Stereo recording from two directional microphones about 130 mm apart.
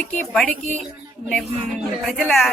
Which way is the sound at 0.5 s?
70° right (ahead or behind).